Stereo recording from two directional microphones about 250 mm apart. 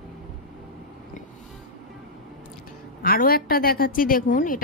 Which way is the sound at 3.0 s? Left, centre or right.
Left.